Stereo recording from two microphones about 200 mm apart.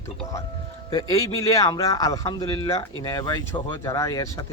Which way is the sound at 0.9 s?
15° left (ahead or behind).